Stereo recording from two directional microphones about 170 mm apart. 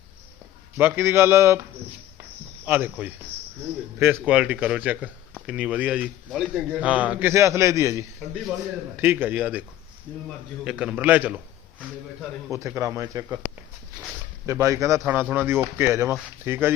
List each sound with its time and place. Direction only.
0.8 s speech: 15° right (ahead or behind)
2.6 s a man's voice: 10° right (ahead or behind)
12.5 s speech: 20° right (ahead or behind)
14.4 s speech: 15° right (ahead or behind)